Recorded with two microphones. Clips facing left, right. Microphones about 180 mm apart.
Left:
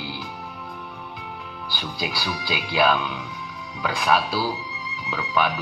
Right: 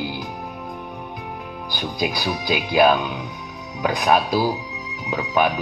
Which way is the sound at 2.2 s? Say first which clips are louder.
Right 5 dB; 45° right (ahead or behind).